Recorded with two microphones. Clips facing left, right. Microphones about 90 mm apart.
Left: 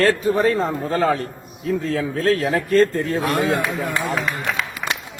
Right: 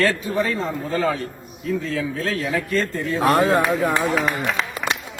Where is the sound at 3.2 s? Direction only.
40° right (ahead or behind).